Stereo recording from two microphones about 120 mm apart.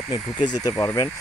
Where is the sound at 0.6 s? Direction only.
30° left (ahead or behind).